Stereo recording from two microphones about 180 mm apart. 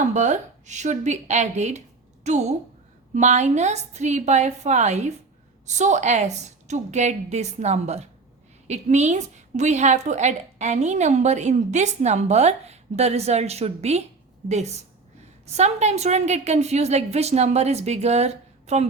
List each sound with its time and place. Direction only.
0.1 s a woman's voice: 40° right (ahead or behind)